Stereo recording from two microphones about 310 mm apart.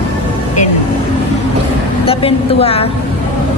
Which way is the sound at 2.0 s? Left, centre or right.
Centre.